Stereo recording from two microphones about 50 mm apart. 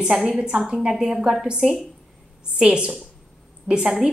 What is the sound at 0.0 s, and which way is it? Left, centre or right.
A woman's voice, centre.